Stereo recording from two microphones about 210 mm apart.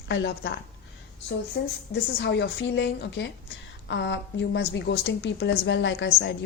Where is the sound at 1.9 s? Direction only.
55° left (ahead or behind).